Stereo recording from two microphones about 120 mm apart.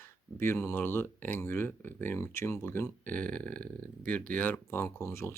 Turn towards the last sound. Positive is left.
turn(degrees=20)  # may be behind; listen again after turning